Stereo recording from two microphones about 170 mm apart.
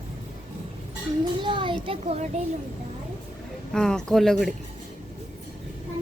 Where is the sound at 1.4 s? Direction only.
30° right (ahead or behind).